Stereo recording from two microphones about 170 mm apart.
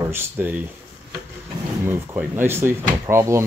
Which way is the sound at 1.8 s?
10° right (ahead or behind).